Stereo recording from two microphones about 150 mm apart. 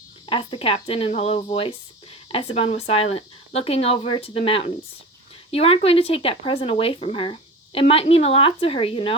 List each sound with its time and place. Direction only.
0.3 s speech: 35° left (ahead or behind)